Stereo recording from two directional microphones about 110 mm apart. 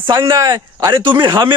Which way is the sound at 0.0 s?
45° right (ahead or behind).